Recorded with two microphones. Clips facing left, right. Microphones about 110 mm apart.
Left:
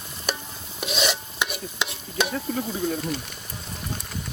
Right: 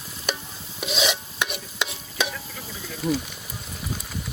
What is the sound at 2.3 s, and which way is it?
Stir, 45° left (ahead or behind).